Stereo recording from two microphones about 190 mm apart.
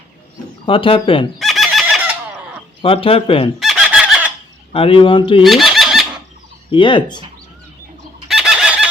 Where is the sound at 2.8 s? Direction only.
30° left (ahead or behind).